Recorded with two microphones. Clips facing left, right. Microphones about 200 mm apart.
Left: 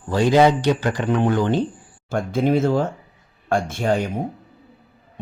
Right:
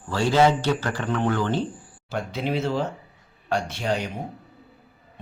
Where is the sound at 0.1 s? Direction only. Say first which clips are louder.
Left 4 dB; 15° left (ahead or behind).